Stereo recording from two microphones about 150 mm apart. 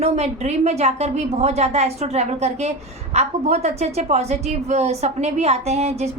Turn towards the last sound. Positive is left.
turn(degrees=-45)  # may be behind; listen again after turning